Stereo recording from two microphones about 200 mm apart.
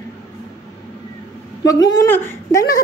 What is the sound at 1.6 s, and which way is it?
A woman's voice, 20° left (ahead or behind).